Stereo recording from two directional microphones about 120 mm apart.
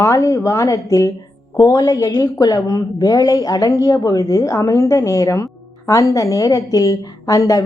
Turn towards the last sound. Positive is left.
turn(degrees=30)  # may be behind; listen again after turning